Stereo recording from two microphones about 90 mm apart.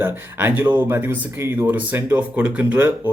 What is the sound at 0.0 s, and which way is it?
Speech, 25° right (ahead or behind).